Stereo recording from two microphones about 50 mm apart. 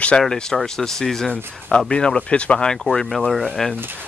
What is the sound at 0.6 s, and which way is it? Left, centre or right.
Speech, centre.